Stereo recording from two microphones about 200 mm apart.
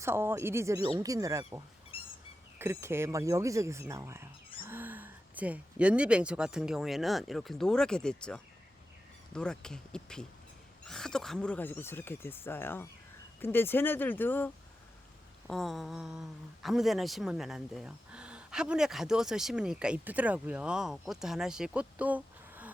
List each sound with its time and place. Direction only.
0.0 s speech: 10° right (ahead or behind)
2.6 s speech: 10° right (ahead or behind)